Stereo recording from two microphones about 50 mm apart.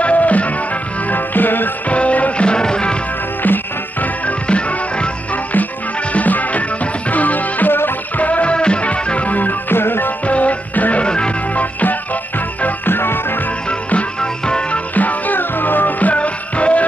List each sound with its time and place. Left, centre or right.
0.0 s music: left
1.9 s music: left
3.4 s music: left
8.2 s music: left
10.2 s music: left
12.6 s music: left
13.7 s music: left
15.0 s music: left